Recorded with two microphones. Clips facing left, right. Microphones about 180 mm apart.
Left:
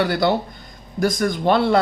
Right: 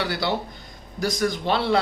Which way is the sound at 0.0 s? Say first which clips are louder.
Left 7 dB; 50° left (ahead or behind).